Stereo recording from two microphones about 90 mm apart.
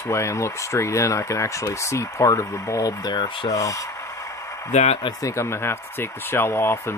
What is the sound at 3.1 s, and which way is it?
Rub, 75° left (ahead or behind).